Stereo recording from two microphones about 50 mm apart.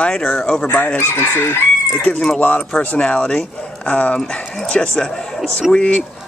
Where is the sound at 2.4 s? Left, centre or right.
Left.